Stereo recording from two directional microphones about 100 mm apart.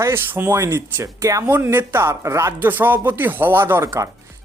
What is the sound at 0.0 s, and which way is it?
Speech, 25° right (ahead or behind).